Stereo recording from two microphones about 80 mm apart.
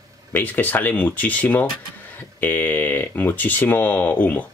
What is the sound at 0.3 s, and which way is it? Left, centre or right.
Speech, left.